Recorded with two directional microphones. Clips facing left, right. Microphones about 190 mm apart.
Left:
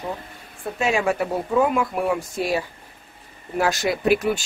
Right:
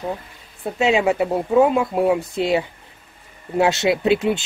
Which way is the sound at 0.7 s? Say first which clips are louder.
Right 4 dB; 20° right (ahead or behind).